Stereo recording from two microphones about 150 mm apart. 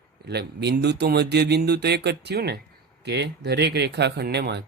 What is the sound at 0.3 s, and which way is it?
Speech, 90° right.